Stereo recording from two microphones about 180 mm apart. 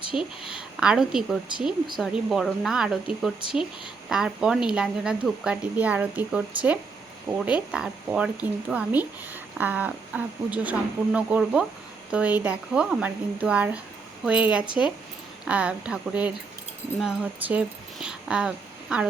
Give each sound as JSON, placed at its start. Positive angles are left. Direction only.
{"t": 0.1, "sound": "a woman's voice", "side_deg": 30}
{"t": 0.5, "sound": "speech", "side_deg": -5}